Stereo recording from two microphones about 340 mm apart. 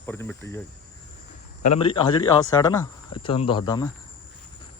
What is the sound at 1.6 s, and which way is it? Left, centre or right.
Speech, centre.